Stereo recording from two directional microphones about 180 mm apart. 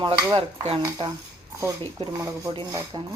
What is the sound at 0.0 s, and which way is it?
Speech, 25° right (ahead or behind).